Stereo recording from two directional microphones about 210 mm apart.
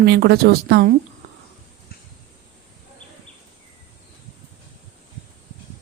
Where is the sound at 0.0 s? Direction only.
50° right (ahead or behind).